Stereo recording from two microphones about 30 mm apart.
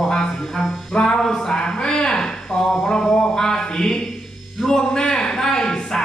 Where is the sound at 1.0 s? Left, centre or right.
Left.